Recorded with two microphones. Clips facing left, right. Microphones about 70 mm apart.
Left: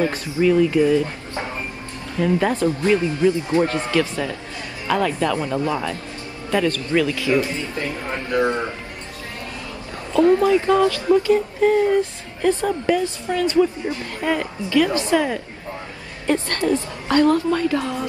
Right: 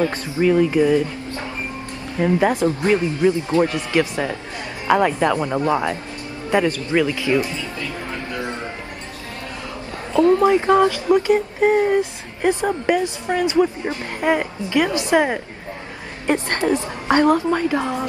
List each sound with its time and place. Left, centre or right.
0.4 s speech: right
2.1 s speech: centre
10.4 s speech: right